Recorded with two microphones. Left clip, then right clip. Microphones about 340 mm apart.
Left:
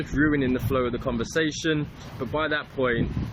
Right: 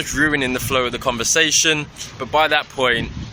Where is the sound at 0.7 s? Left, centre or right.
Centre.